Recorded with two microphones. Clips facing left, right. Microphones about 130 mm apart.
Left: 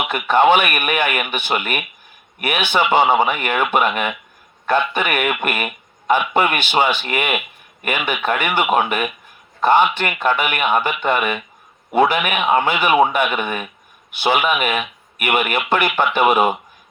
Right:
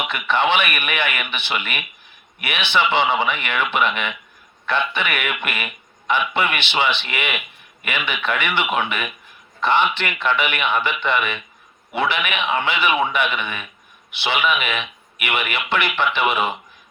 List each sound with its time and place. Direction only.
0.1 s a man's voice: 45° left (ahead or behind)